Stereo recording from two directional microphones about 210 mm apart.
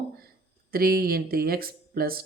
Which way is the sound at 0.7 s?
45° right (ahead or behind).